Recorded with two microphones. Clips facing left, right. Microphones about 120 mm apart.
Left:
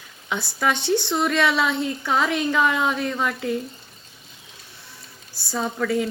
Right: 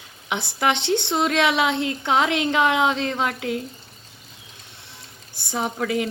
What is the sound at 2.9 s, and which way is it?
Speech, 80° right.